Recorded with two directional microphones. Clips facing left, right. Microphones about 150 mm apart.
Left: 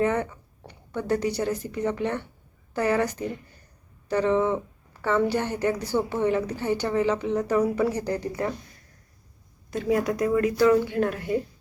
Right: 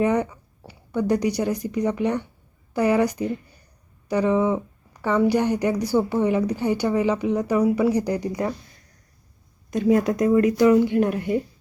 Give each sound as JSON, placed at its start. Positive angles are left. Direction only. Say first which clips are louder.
{"t": 0.0, "sound": "a woman's voice", "louder": "right 3 dB", "side_deg": -15}
{"t": 9.6, "sound": "a woman's voice", "louder": "right 5 dB", "side_deg": -20}